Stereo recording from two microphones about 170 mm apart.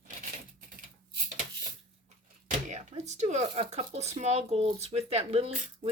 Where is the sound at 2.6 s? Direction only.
40° right (ahead or behind).